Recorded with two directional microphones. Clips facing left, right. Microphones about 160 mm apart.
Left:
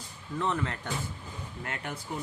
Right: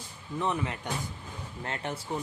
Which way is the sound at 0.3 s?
15° right (ahead or behind).